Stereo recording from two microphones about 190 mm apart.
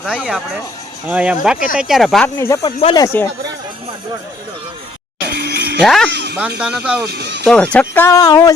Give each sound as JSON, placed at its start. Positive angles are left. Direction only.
{"t": 0.0, "sound": "speech", "side_deg": -5}
{"t": 1.5, "sound": "speech", "side_deg": 45}
{"t": 1.8, "sound": "speech", "side_deg": 0}
{"t": 2.3, "sound": "speech", "side_deg": 15}
{"t": 5.3, "sound": "music", "side_deg": -55}
{"t": 5.8, "sound": "speech", "side_deg": 0}
{"t": 6.1, "sound": "speech", "side_deg": -65}
{"t": 6.6, "sound": "speech", "side_deg": -5}
{"t": 7.0, "sound": "speech", "side_deg": -60}
{"t": 7.4, "sound": "speech", "side_deg": 5}